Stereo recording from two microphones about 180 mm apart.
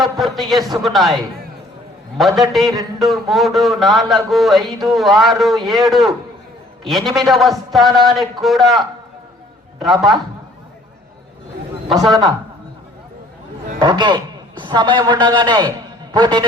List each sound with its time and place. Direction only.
0.3 s a man's voice: centre (ahead or behind)
2.1 s a man's voice: centre (ahead or behind)
9.8 s a man's voice: centre (ahead or behind)
11.9 s a man's voice: centre (ahead or behind)
13.7 s a man's voice: 25° right (ahead or behind)